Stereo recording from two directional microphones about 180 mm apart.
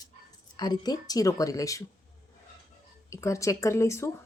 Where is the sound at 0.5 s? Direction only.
25° left (ahead or behind).